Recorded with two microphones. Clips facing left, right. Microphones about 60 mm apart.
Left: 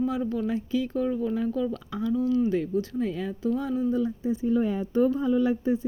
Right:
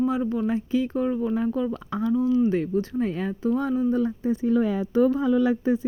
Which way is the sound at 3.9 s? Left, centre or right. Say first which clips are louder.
Right 3 dB; right.